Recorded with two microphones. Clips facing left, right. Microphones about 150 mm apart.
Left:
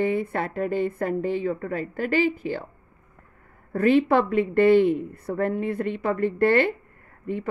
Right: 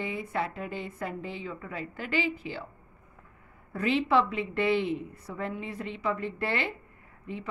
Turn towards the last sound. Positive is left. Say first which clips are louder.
# left 9 dB
turn(degrees=55)  # may be behind; listen again after turning